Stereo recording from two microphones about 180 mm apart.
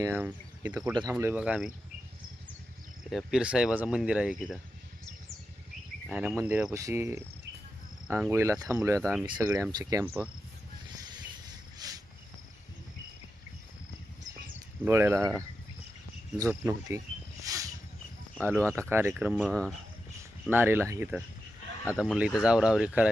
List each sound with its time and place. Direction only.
0.0 s speech: 10° right (ahead or behind)
3.1 s speech: centre (ahead or behind)
6.1 s cricket: 5° right (ahead or behind)
6.3 s speech: 10° right (ahead or behind)
9.0 s speech: centre (ahead or behind)
9.2 s speech: 20° right (ahead or behind)
11.8 s cricket: 20° right (ahead or behind)
14.8 s speech: 15° right (ahead or behind)
17.5 s a sound: 20° right (ahead or behind)
18.4 s speech: 15° right (ahead or behind)
19.4 s speech: 5° left (ahead or behind)
20.5 s speech: 10° right (ahead or behind)